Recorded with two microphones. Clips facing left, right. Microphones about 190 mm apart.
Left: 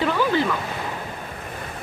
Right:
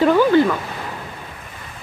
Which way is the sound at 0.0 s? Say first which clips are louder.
Right 8 dB; 45° right (ahead or behind).